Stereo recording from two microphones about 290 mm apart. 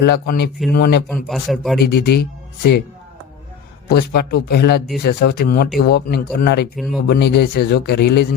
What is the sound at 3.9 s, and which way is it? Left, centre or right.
Speech, left.